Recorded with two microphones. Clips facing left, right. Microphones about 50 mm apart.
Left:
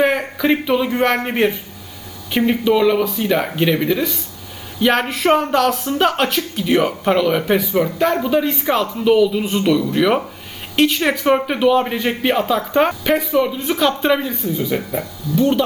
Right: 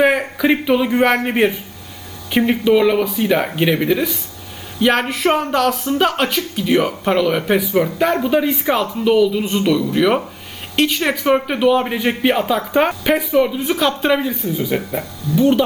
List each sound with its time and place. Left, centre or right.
0.0 s a man's voice: centre
15.3 s speech: right